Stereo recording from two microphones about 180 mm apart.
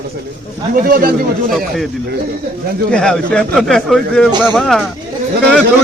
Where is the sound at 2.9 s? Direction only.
5° left (ahead or behind).